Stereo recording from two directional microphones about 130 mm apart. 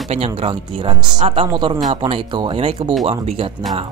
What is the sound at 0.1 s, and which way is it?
Speech, 50° right (ahead or behind).